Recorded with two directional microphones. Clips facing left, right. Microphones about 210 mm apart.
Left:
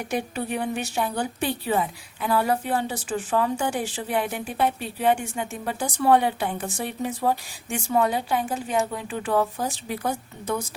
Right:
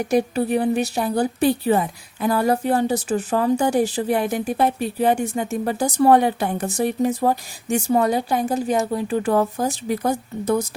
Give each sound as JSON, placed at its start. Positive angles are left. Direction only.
{"t": 0.1, "sound": "a woman's voice", "side_deg": -40}